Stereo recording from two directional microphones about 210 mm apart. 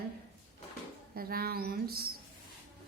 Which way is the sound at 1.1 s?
45° right (ahead or behind).